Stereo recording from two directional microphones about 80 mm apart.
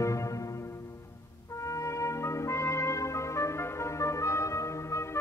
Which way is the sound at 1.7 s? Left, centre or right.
Left.